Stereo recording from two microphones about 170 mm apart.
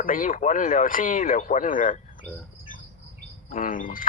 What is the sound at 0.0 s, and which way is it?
Speech, 55° left (ahead or behind).